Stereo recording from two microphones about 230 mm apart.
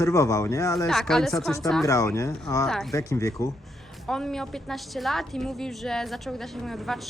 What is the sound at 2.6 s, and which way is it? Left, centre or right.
Speech, centre.